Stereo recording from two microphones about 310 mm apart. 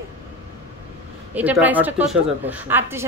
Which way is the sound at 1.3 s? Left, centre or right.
Centre.